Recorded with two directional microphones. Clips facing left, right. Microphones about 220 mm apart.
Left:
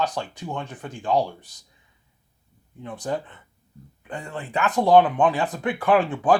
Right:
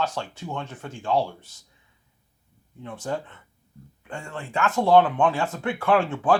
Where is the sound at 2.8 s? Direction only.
15° left (ahead or behind).